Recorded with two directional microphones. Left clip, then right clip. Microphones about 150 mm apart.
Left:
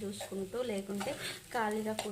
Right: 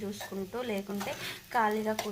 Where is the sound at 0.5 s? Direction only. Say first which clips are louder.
Right 2 dB; 20° left (ahead or behind).